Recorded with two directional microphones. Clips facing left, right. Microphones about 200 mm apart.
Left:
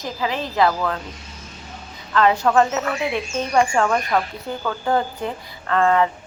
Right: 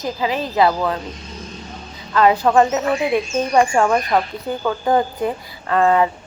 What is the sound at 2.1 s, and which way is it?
A woman's voice, 15° right (ahead or behind).